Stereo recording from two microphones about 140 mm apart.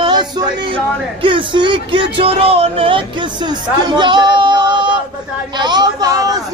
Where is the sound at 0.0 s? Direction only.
30° right (ahead or behind).